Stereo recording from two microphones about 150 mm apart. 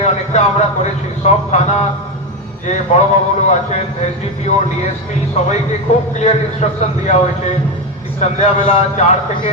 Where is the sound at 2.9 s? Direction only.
50° left (ahead or behind).